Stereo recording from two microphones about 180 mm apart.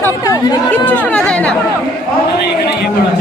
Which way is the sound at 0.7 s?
10° left (ahead or behind).